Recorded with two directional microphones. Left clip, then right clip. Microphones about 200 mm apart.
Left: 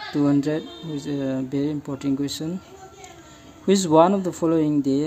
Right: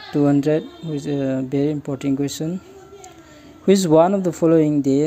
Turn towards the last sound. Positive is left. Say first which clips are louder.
# right 5 dB
turn(degrees=-15)  # may be behind; listen again after turning